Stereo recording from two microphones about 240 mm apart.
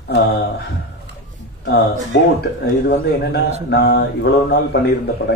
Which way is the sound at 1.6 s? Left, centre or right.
Left.